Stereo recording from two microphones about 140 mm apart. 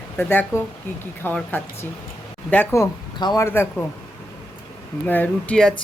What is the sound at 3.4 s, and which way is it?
Speech, 15° left (ahead or behind).